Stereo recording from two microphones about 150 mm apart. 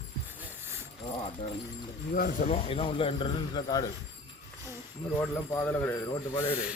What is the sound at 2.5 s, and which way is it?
A man's voice, 40° left (ahead or behind).